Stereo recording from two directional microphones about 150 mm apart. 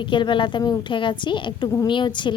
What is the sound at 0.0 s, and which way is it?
Speech, 30° left (ahead or behind).